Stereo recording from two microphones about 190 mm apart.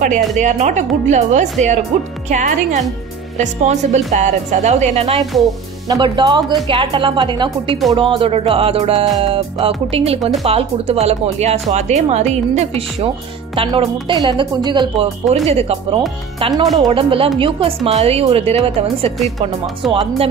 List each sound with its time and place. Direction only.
0.4 s speech: 40° right (ahead or behind)
5.9 s speech: 25° right (ahead or behind)
15.2 s speech: 35° right (ahead or behind)